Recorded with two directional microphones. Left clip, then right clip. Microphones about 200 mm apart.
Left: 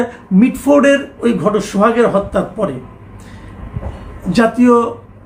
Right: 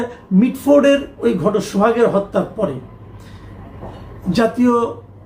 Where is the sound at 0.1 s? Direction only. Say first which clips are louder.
Left 4 dB; 10° left (ahead or behind).